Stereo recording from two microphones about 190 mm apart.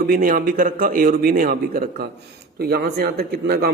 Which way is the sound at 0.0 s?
50° right (ahead or behind).